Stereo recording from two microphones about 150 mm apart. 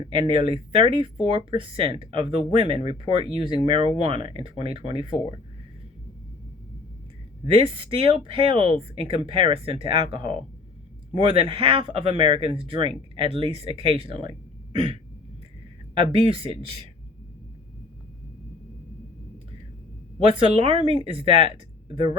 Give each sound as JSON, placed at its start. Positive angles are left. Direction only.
{"t": 0.0, "sound": "speech", "side_deg": -30}
{"t": 7.4, "sound": "speech", "side_deg": -35}
{"t": 16.1, "sound": "speech", "side_deg": -35}
{"t": 20.2, "sound": "speech", "side_deg": -35}